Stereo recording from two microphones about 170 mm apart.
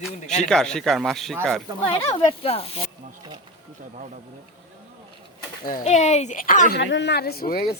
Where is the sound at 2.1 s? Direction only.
35° left (ahead or behind).